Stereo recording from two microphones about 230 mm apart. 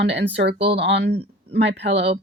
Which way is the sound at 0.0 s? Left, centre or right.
Right.